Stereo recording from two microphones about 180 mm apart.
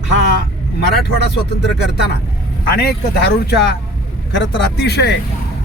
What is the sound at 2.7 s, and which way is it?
Speech, 65° left (ahead or behind).